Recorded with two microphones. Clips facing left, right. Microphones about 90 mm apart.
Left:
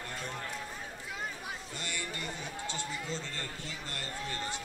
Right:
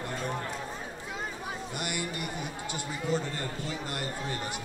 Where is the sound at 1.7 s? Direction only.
15° right (ahead or behind).